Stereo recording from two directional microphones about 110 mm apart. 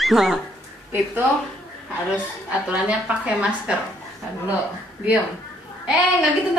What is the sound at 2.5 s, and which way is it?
A woman's voice, 10° right (ahead or behind).